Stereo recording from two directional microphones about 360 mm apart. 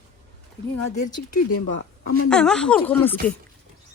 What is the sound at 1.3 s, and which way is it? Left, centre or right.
Speech, left.